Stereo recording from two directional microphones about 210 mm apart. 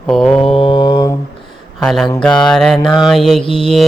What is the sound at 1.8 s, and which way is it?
Mantra, centre (ahead or behind).